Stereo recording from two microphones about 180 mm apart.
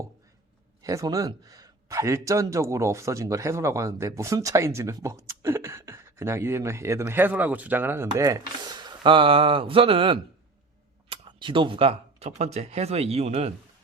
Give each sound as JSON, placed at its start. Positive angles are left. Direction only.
{"t": 0.8, "sound": "a man's voice", "side_deg": -20}